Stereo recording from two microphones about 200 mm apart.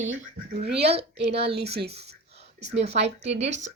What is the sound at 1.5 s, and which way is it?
Speech, 55° right (ahead or behind).